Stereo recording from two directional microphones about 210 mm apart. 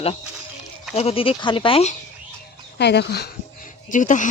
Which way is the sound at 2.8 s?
55° left (ahead or behind).